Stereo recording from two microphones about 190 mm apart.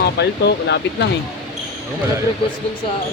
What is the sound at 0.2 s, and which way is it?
Speech, 65° left (ahead or behind).